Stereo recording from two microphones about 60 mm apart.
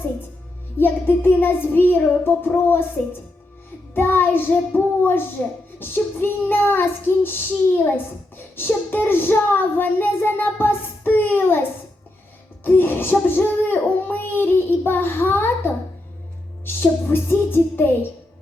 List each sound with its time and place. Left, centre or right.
0.8 s child singing: left
12.6 s child singing: left